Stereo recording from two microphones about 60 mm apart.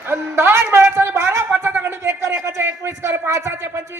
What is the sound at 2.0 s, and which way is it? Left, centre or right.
Speech, right.